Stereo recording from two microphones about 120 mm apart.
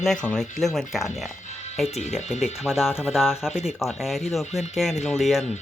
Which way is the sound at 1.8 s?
65° left (ahead or behind).